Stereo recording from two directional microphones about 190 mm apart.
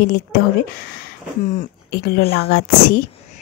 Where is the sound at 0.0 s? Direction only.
50° left (ahead or behind).